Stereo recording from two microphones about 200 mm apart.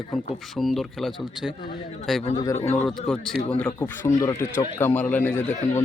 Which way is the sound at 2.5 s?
30° left (ahead or behind).